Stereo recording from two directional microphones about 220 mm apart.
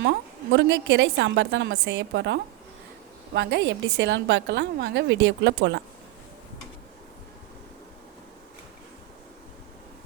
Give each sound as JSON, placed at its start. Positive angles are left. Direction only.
{"t": 0.0, "sound": "a woman's voice", "side_deg": -55}